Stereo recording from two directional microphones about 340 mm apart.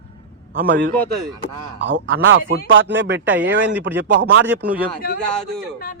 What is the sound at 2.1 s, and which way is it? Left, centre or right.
Speech, right.